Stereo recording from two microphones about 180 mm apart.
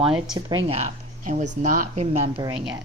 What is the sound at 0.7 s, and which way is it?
Speech, 40° right (ahead or behind).